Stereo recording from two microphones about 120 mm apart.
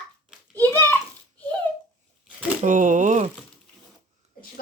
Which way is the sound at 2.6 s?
90° right.